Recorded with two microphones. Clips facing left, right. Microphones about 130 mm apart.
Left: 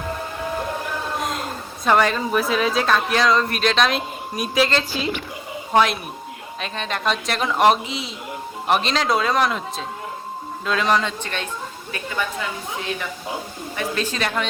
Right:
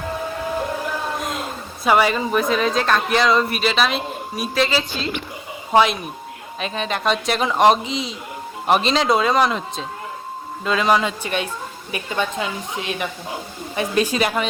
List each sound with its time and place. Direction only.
1.2 s a woman's voice: centre (ahead or behind)